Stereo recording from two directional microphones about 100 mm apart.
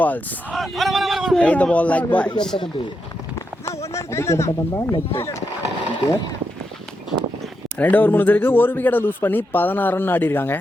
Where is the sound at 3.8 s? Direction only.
30° left (ahead or behind).